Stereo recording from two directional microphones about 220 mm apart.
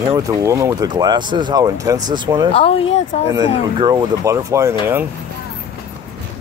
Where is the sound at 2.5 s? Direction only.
25° left (ahead or behind).